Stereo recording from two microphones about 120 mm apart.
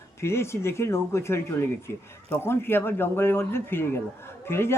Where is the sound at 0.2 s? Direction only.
20° left (ahead or behind).